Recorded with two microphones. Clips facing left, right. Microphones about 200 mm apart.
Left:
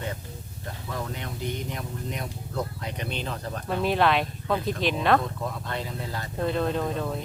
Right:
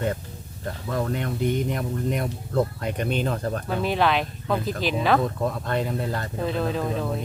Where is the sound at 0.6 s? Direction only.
55° right (ahead or behind).